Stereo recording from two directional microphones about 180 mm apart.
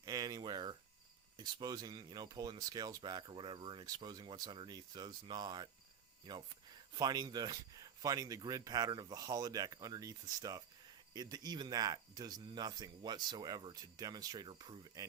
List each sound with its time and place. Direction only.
0.0 s a sound: 20° right (ahead or behind)
1.4 s speech: 25° right (ahead or behind)
6.9 s speech: 20° right (ahead or behind)